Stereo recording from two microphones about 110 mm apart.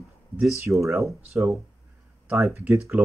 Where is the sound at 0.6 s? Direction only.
25° right (ahead or behind).